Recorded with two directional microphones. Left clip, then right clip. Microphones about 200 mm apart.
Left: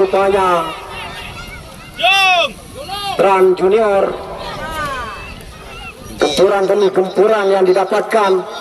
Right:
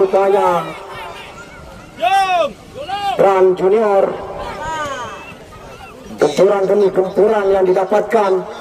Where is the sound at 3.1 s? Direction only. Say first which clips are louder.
Even; 40° left (ahead or behind).